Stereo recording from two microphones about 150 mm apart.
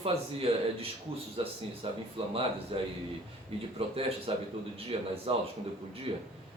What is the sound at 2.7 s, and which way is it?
Speech, 40° right (ahead or behind).